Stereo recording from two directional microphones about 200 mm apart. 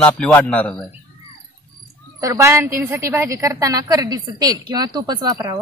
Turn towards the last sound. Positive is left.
turn(degrees=-20)  # may be behind; listen again after turning